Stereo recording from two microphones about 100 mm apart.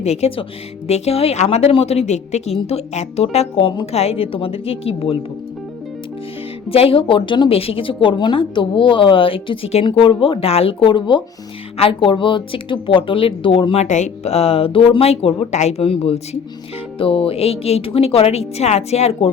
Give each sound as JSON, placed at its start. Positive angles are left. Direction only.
{"t": 0.0, "sound": "a woman's voice", "side_deg": 90}
{"t": 0.9, "sound": "a woman's voice", "side_deg": 90}
{"t": 6.7, "sound": "a woman's voice", "side_deg": 70}
{"t": 14.3, "sound": "speech", "side_deg": 90}
{"t": 17.0, "sound": "a woman's voice", "side_deg": 65}